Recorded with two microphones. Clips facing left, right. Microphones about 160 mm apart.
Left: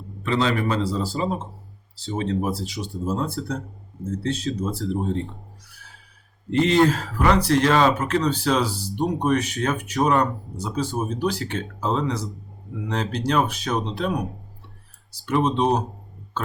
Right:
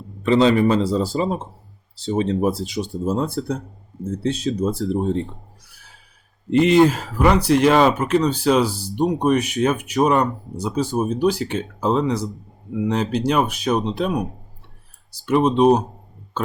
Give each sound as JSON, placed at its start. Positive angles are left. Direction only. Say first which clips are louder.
{"t": 0.2, "sound": "speech", "louder": "right 7 dB", "side_deg": -20}
{"t": 6.5, "sound": "speech", "louder": "right 4 dB", "side_deg": -10}
{"t": 15.3, "sound": "speech", "louder": "right 6 dB", "side_deg": -10}